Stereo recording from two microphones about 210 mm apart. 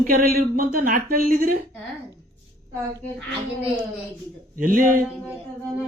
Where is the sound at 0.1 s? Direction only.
45° right (ahead or behind).